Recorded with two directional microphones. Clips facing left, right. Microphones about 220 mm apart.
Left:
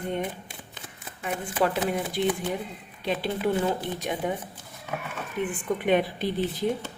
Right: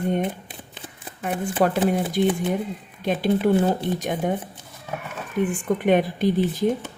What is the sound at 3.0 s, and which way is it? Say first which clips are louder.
Speech: right 6 dB; 45° right (ahead or behind).